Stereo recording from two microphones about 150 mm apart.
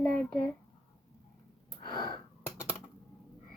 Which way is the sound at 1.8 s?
30° left (ahead or behind).